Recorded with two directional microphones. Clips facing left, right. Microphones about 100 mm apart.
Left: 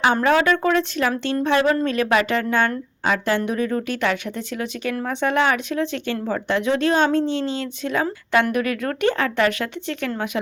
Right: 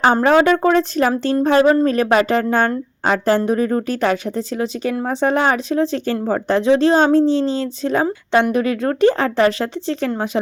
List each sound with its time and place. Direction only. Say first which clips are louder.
0.0 s a woman's voice: right 4 dB; 35° right (ahead or behind)